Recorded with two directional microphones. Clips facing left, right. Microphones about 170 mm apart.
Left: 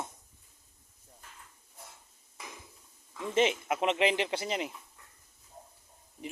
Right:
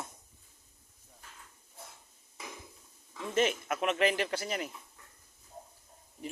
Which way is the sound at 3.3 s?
20° left (ahead or behind).